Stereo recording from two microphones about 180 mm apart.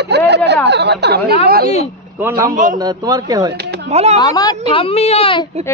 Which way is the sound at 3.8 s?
35° right (ahead or behind).